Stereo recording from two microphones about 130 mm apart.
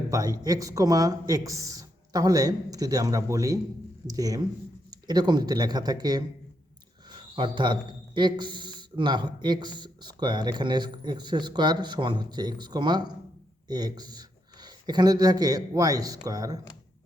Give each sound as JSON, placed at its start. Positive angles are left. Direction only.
{"t": 0.1, "sound": "a man's voice", "side_deg": -30}